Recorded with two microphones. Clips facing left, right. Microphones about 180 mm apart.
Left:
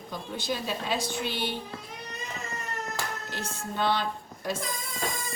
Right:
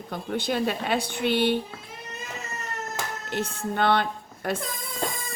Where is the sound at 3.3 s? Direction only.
60° right (ahead or behind).